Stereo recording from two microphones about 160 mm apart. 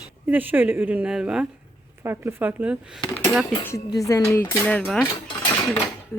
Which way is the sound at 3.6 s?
20° left (ahead or behind).